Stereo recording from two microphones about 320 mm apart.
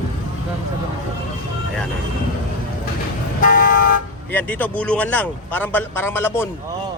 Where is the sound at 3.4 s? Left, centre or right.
Left.